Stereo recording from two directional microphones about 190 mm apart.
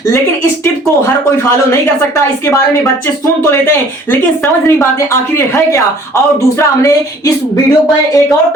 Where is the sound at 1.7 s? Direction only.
15° left (ahead or behind).